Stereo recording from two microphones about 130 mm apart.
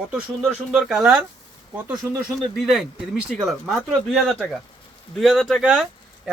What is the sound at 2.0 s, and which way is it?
Speech, 25° right (ahead or behind).